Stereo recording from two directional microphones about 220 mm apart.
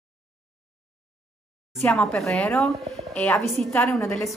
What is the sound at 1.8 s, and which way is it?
A woman's voice, centre (ahead or behind).